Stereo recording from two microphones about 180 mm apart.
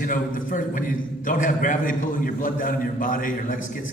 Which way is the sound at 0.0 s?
50° left (ahead or behind).